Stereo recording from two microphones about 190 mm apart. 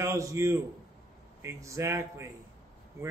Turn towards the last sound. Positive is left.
turn(degrees=-15)  # may be behind; listen again after turning